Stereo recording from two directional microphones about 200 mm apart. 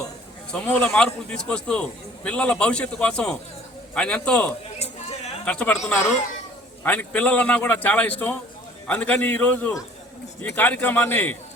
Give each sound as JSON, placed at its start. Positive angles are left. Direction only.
{"t": 0.5, "sound": "a man's voice", "side_deg": 5}
{"t": 4.8, "sound": "a sound", "side_deg": 35}
{"t": 5.5, "sound": "a man's voice", "side_deg": 5}